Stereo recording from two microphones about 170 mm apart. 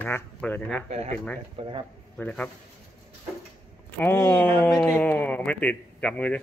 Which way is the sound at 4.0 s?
15° left (ahead or behind).